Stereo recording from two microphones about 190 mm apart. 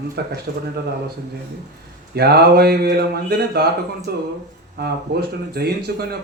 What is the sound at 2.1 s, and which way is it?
Speech, 55° right (ahead or behind).